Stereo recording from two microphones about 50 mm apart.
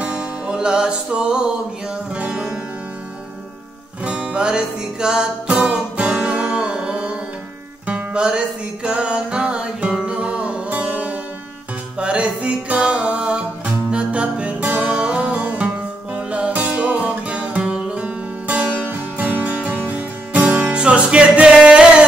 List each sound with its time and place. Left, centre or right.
0.0 s music: centre
4.0 s music: right
10.7 s music: right
15.0 s music: centre